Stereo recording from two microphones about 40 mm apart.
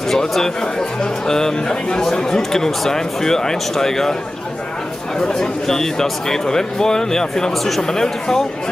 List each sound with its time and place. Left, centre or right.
0.1 s speech: centre
5.3 s speech: centre